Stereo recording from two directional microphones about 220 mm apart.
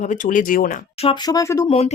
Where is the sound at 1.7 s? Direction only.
30° left (ahead or behind).